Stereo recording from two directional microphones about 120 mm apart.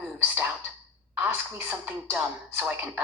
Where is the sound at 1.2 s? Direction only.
15° right (ahead or behind).